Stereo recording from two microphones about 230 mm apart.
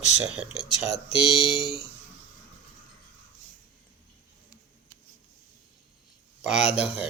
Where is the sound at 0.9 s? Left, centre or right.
Left.